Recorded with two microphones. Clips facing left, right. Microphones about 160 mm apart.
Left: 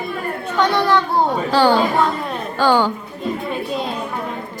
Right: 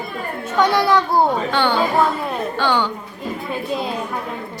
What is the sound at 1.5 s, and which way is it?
A woman's voice, 40° left (ahead or behind).